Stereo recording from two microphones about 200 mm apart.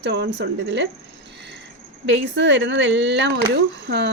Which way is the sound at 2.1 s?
65° right (ahead or behind).